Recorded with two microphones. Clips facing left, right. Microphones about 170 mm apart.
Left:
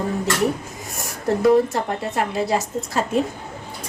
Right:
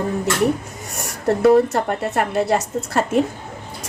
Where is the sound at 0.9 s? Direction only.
70° right (ahead or behind).